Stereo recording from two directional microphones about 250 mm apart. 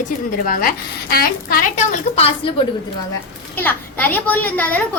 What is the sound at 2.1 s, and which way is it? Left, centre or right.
Speech, left.